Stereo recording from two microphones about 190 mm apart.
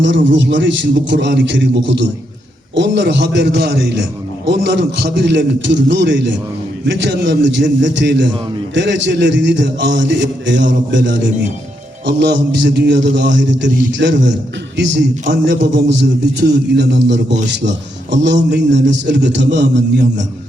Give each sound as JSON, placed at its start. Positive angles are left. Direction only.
{"t": 0.0, "sound": "a man's voice", "side_deg": -70}